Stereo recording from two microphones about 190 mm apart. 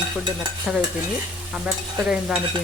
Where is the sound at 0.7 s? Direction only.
Centre (ahead or behind).